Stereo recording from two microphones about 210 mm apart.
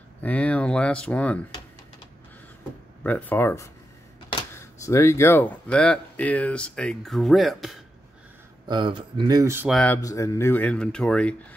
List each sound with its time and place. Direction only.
0.2 s speech: 5° left (ahead or behind)
3.0 s speech: 10° left (ahead or behind)
8.6 s speech: 20° right (ahead or behind)
9.7 s speech: centre (ahead or behind)
10.0 s speech: 15° left (ahead or behind)